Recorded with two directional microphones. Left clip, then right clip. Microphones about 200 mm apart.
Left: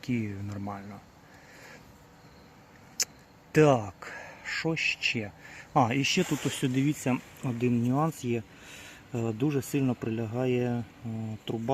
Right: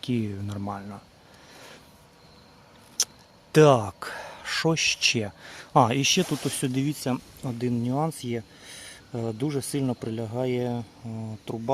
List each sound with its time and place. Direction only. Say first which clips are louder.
0.0 s speech: right 4 dB; 25° right (ahead or behind)
3.5 s speech: right 5 dB; 30° right (ahead or behind); by 11.7 s centre (ahead or behind)